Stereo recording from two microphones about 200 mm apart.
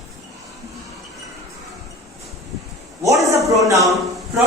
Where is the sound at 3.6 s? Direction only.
15° right (ahead or behind).